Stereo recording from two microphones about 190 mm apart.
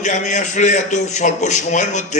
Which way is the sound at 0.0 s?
40° left (ahead or behind).